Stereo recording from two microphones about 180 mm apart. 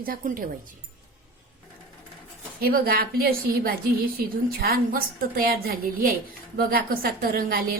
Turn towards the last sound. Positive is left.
turn(degrees=-55)  # may be behind; listen again after turning